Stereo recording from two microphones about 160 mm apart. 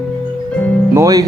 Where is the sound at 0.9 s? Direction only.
20° right (ahead or behind).